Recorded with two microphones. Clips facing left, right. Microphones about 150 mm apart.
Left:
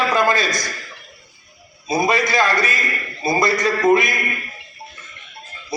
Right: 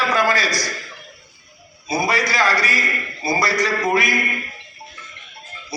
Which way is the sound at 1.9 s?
20° left (ahead or behind).